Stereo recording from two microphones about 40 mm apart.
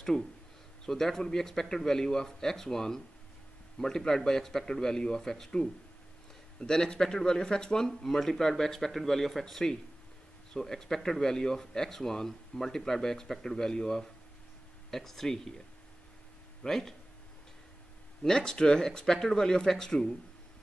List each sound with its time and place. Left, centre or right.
0.8 s speech: centre
6.6 s speech: centre
16.6 s speech: centre
18.2 s speech: centre